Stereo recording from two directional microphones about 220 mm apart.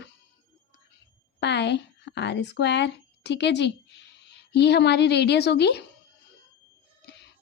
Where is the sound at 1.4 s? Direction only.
50° left (ahead or behind).